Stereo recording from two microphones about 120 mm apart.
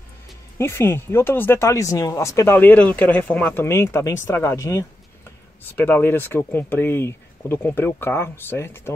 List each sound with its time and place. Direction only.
0.6 s speech: 20° left (ahead or behind)